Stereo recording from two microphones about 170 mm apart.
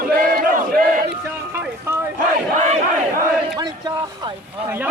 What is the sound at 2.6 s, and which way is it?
Battle cry, 40° right (ahead or behind).